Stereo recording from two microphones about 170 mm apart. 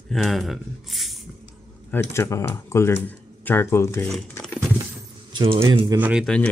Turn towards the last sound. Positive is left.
turn(degrees=-10)  # may be behind; listen again after turning